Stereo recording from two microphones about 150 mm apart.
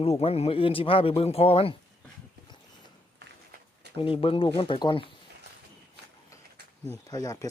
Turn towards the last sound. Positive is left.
turn(degrees=25)  # may be behind; listen again after turning